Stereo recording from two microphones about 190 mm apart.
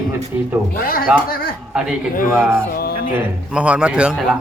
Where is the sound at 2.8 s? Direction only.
55° left (ahead or behind).